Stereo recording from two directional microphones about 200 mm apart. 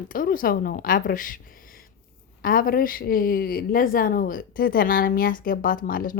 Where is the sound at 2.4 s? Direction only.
45° left (ahead or behind).